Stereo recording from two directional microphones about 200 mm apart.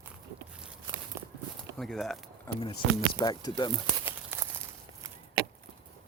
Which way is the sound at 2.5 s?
25° left (ahead or behind).